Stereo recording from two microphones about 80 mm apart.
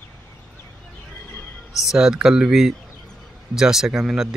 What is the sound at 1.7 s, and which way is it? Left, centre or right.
Speech, centre.